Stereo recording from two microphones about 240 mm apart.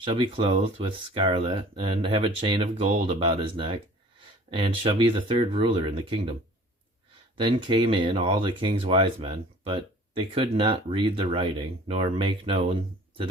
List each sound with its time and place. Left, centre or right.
0.0 s speech: right
7.3 s speech: right